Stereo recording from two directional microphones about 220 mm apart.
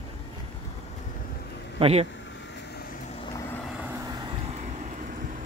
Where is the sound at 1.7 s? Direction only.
25° right (ahead or behind).